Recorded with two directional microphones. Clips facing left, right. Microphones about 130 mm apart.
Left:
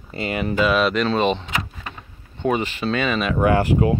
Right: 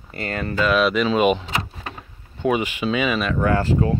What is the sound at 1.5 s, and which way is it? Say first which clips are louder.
Power windows: right 1 dB; 30° right (ahead or behind).